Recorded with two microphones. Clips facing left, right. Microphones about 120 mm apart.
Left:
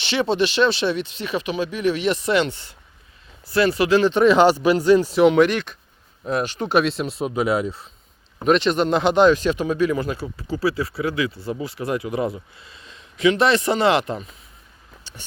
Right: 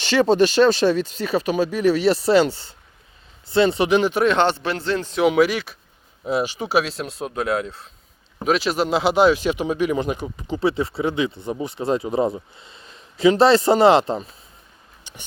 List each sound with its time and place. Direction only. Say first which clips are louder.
0.0 s speech: right 4 dB; 40° right (ahead or behind); by 4.1 s 20° right (ahead or behind)
4.1 s speech: left 4 dB; centre (ahead or behind)
5.2 s speech: left 2 dB; 5° right (ahead or behind); by 14.3 s 30° right (ahead or behind)
15.1 s a sound: even; 15° right (ahead or behind)